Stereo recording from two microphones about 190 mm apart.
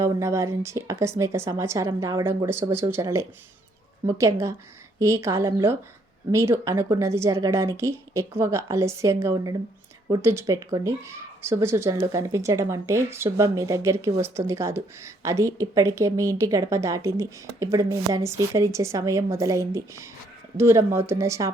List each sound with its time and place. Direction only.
0.0 s speech: 15° right (ahead or behind)